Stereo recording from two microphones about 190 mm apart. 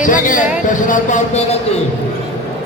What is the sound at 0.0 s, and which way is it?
Speech, 45° left (ahead or behind).